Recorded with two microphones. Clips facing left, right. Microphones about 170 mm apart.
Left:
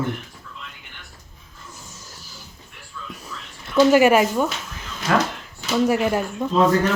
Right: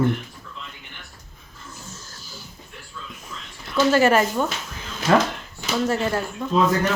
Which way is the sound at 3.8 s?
15° left (ahead or behind).